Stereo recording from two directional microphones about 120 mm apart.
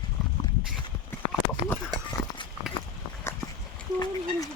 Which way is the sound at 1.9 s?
35° right (ahead or behind).